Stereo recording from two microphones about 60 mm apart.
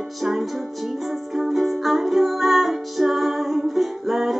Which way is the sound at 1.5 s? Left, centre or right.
Centre.